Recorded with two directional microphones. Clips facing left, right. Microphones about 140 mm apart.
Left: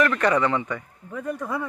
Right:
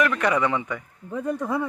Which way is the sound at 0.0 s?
10° right (ahead or behind).